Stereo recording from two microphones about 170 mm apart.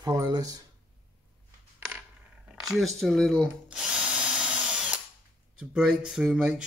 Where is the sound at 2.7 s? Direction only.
Centre (ahead or behind).